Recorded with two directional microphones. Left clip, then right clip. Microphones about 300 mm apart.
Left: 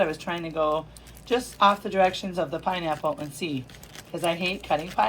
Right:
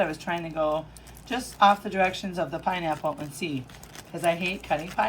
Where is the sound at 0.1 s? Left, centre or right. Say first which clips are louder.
Even; centre.